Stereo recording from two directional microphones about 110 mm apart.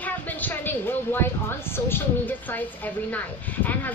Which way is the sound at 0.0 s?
15° left (ahead or behind).